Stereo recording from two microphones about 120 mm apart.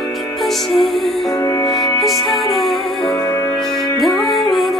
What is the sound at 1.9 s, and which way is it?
Music, centre (ahead or behind).